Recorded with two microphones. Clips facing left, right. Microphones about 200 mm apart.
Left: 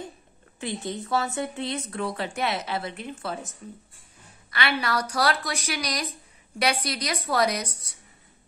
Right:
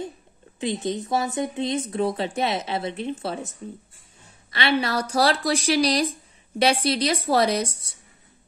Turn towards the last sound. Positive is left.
turn(degrees=-25)  # may be behind; listen again after turning